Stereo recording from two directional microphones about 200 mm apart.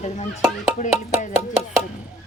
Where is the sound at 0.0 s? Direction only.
35° left (ahead or behind).